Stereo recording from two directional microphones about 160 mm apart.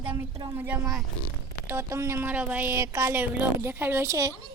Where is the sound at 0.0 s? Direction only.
10° right (ahead or behind).